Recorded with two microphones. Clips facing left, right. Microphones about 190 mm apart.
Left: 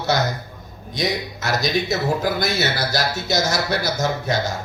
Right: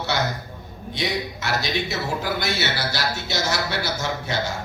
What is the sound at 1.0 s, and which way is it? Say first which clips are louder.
A man's voice: left 3 dB; 40° left (ahead or behind).